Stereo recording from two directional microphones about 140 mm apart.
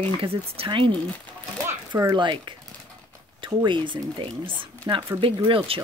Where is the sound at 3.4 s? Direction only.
35° right (ahead or behind).